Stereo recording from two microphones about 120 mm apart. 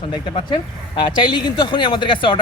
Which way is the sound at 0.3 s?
45° left (ahead or behind).